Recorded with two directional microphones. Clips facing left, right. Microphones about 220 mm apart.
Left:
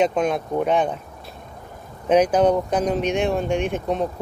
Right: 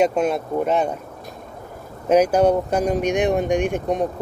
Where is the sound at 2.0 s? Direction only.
10° right (ahead or behind).